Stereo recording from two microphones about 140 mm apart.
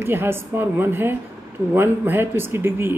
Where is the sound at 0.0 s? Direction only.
15° right (ahead or behind).